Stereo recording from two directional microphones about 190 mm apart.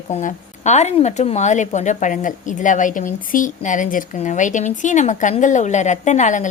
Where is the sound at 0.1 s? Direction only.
40° left (ahead or behind).